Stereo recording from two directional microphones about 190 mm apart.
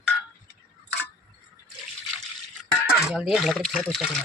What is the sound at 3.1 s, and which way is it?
Speech, centre (ahead or behind).